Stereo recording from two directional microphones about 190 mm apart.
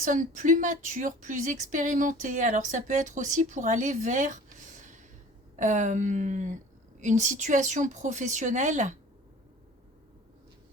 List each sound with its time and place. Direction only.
0.0 s a woman's voice: 45° right (ahead or behind)